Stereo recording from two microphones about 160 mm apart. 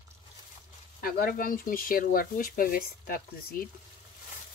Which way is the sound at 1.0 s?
65° left (ahead or behind).